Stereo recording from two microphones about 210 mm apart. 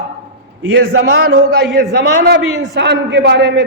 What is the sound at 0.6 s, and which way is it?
Speech, 70° right (ahead or behind).